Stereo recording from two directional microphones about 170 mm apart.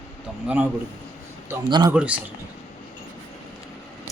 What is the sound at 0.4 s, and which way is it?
A man's voice, 10° right (ahead or behind).